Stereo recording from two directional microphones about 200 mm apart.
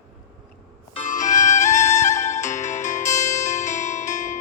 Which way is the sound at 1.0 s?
40° left (ahead or behind).